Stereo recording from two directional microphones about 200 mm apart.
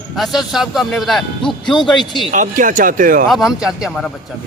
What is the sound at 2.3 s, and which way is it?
Speech, 40° right (ahead or behind).